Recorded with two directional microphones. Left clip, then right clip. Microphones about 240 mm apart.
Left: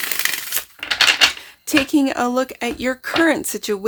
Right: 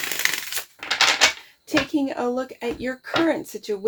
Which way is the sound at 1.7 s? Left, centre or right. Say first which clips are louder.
Left 5 dB; left.